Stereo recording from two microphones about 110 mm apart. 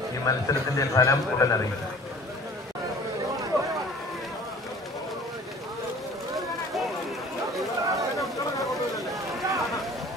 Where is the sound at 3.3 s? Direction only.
30° right (ahead or behind).